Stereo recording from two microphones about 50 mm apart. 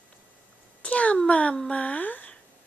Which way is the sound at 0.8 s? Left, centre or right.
Left.